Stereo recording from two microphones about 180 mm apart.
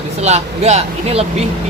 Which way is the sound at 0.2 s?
35° right (ahead or behind).